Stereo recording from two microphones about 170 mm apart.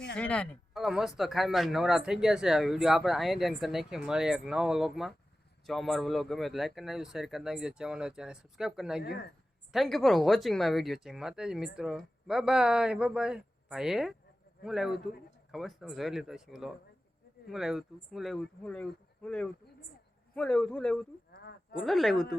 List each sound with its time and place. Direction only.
0.2 s speech: 5° left (ahead or behind)
21.3 s a sound: 60° left (ahead or behind)
21.8 s speech: centre (ahead or behind)